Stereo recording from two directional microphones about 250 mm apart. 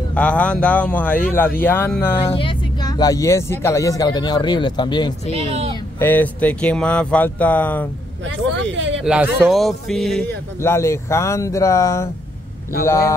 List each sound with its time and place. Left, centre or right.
0.1 s speech: centre
5.5 s speech: right
5.9 s speech: centre
8.3 s speech: right
9.0 s speech: centre